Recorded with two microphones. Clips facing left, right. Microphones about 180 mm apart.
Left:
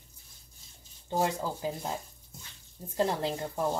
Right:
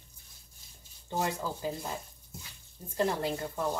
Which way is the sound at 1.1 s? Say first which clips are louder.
Left 3 dB; 15° left (ahead or behind).